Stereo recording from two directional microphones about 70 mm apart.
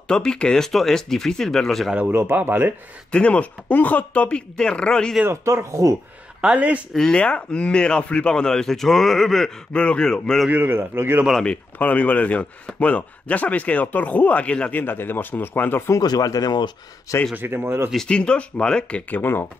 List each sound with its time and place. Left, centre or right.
0.1 s speech: centre
2.1 s a man's voice: right
3.1 s speech: centre
5.3 s speech: right
6.4 s speech: centre
6.9 s speech: centre
9.7 s speech: centre
10.5 s a man's voice: right
11.3 s speech: centre
14.8 s speech: left
16.0 s speech: left
17.4 s a man's voice: right
17.9 s speech: centre; by 19.4 s left